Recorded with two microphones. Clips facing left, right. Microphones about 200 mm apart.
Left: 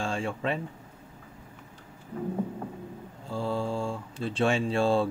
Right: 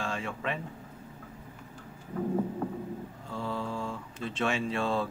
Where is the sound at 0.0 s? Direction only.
30° left (ahead or behind).